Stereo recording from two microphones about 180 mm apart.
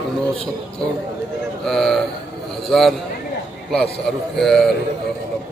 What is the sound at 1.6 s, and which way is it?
A man's voice, centre (ahead or behind).